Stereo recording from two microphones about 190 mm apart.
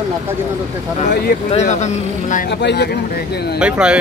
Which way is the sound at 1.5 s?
35° left (ahead or behind).